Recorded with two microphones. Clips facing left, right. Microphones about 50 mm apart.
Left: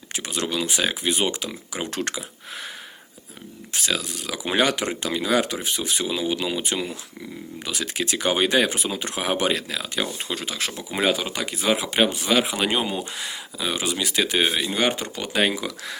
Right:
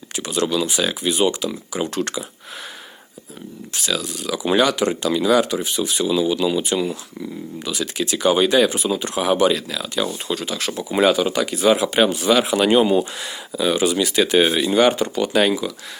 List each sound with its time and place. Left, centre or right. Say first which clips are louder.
0.2 s speech: right 6 dB; left
3.8 s speech: right 2 dB; left
10.7 s speech: right 7 dB; centre